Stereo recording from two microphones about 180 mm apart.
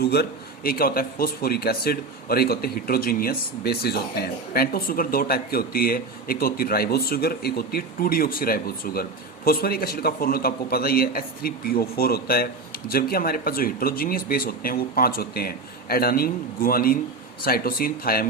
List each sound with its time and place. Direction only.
0.0 s speech: 65° left (ahead or behind)